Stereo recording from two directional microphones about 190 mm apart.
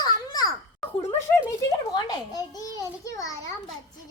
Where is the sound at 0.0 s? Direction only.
20° left (ahead or behind).